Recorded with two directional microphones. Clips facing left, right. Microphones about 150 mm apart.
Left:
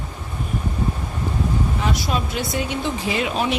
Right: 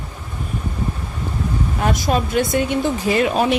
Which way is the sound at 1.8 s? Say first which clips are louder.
Right 4 dB; 45° right (ahead or behind).